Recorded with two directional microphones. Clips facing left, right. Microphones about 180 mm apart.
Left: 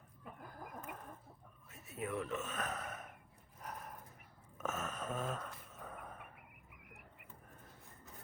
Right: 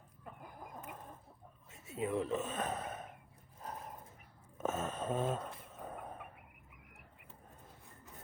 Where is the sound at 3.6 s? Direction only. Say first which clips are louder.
Right 2 dB; 25° right (ahead or behind).